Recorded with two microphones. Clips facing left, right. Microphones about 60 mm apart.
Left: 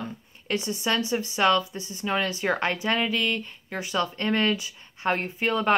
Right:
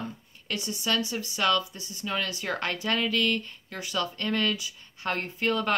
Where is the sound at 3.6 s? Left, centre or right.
Left.